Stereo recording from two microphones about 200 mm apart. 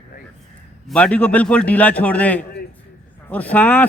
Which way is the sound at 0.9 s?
5° left (ahead or behind).